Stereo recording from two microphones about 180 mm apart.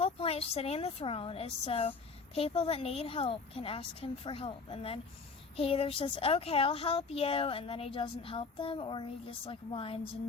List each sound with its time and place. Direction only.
0.0 s a woman's voice: 35° left (ahead or behind)